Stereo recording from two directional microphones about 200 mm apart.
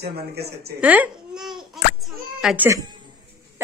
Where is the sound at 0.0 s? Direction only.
55° right (ahead or behind).